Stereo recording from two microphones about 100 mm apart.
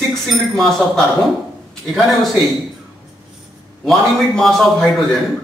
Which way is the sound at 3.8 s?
5° left (ahead or behind).